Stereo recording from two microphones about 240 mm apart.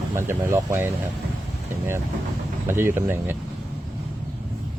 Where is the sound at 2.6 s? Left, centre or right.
Centre.